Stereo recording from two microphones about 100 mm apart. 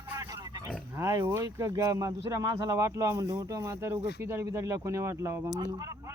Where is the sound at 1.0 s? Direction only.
35° right (ahead or behind).